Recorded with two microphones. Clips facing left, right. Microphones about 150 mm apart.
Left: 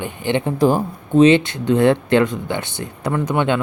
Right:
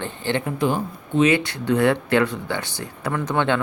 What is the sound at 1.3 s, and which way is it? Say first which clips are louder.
Speech: left 5 dB; 20° left (ahead or behind).